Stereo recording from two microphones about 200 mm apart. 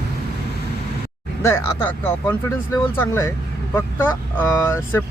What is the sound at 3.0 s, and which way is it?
Speech, 15° left (ahead or behind).